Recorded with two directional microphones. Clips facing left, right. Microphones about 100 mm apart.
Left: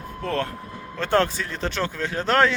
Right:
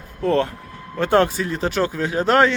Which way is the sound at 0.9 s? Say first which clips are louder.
Right 4 dB; 15° right (ahead or behind).